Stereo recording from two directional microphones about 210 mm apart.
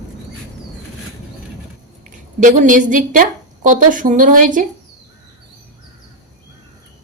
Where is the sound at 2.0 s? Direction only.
35° right (ahead or behind).